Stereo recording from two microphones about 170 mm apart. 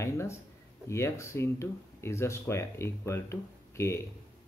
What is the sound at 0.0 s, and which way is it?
Speech, 15° left (ahead or behind).